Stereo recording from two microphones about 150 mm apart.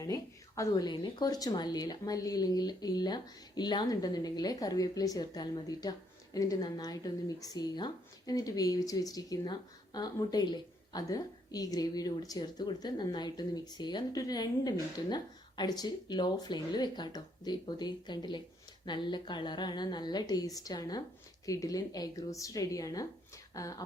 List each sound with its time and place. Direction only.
0.0 s speech: 20° left (ahead or behind)